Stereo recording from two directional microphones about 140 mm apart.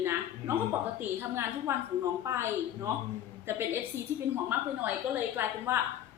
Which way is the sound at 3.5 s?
15° right (ahead or behind).